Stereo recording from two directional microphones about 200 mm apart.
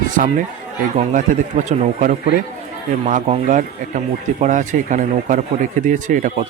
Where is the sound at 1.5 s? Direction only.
35° right (ahead or behind).